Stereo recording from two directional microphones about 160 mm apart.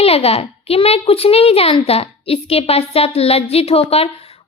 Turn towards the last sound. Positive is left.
turn(degrees=40)  # may be behind; listen again after turning